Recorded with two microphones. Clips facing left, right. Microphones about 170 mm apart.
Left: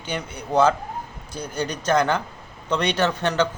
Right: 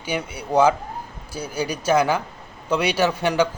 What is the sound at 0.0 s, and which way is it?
A man's voice, 10° right (ahead or behind).